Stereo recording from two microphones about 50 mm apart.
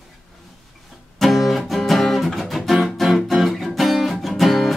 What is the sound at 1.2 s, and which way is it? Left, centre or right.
Music, centre.